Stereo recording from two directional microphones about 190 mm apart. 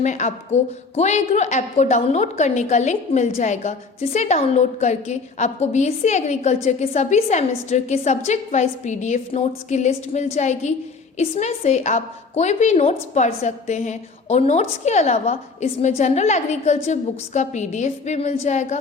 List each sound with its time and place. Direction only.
0.0 s a woman's voice: 40° left (ahead or behind)